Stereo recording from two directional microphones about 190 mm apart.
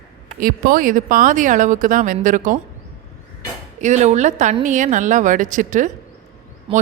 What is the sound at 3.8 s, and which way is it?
Speech, 40° right (ahead or behind).